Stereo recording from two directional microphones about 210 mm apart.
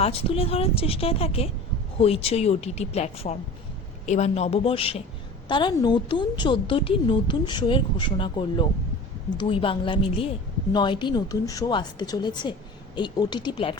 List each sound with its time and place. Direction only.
0.0 s a woman's voice: 30° left (ahead or behind)